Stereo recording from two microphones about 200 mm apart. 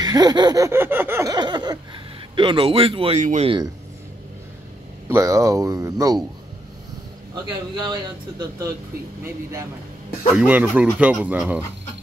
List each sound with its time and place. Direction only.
0.0 s a sound: 20° right (ahead or behind)
2.3 s speech: 25° right (ahead or behind)
5.0 s speech: 15° right (ahead or behind)
7.9 s speech: 20° right (ahead or behind)